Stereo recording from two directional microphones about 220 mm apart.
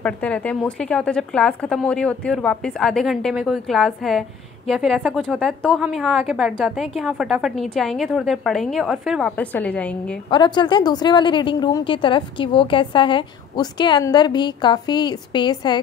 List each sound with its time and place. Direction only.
0.0 s a woman's voice: 5° left (ahead or behind)
10.3 s a woman's voice: 20° left (ahead or behind)